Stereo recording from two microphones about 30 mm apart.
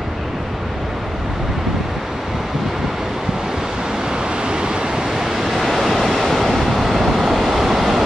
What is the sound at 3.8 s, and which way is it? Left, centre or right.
Vehicle, right.